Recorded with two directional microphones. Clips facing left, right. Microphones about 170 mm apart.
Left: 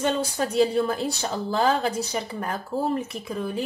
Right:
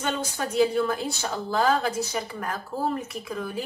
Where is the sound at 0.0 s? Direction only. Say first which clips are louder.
Left 4 dB; 30° left (ahead or behind).